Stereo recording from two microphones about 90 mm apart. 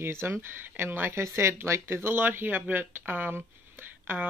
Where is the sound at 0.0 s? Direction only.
25° right (ahead or behind).